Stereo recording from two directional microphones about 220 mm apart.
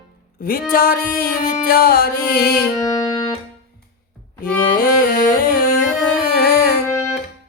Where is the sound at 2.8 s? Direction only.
15° left (ahead or behind).